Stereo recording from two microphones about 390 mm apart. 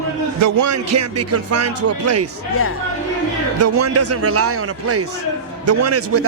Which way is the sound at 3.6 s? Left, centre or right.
Right.